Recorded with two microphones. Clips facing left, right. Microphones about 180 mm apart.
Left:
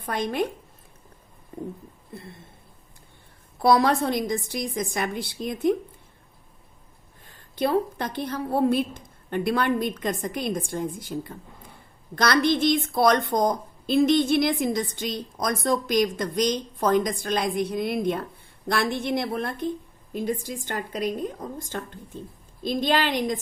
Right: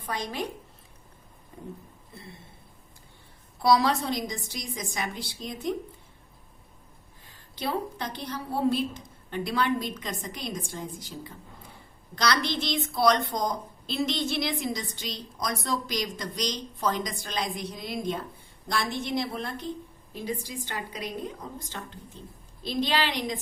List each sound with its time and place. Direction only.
0.0 s a woman's voice: 55° left (ahead or behind)
3.6 s a woman's voice: 55° left (ahead or behind)
7.3 s a woman's voice: 50° left (ahead or behind)